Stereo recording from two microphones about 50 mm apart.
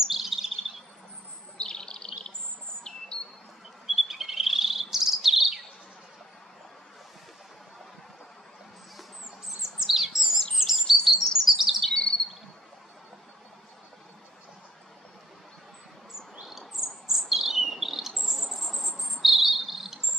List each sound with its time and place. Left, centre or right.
0.0 s chirp: centre
1.6 s bird: centre
3.8 s chirp: centre
9.6 s chirp: centre
11.9 s bird: centre
16.4 s bird vocalization: centre
17.3 s cricket: centre